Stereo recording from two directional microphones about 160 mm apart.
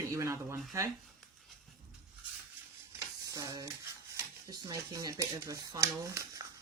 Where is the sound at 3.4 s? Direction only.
20° right (ahead or behind).